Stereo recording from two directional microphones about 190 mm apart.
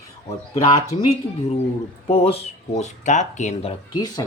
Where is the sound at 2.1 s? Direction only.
35° left (ahead or behind).